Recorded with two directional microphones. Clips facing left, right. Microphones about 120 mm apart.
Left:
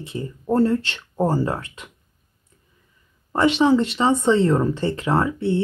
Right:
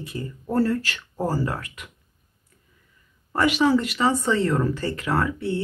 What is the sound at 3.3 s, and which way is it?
Speech, 25° left (ahead or behind).